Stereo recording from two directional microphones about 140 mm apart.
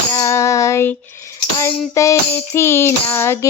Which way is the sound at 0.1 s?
25° left (ahead or behind).